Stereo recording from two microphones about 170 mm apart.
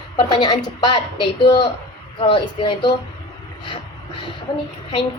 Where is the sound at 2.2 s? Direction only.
30° left (ahead or behind).